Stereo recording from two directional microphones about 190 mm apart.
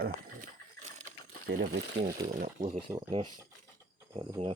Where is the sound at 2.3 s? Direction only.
45° right (ahead or behind).